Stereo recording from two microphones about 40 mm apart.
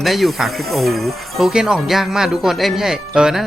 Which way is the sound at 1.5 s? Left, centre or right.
Centre.